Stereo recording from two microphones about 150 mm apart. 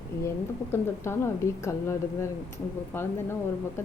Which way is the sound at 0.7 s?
15° left (ahead or behind).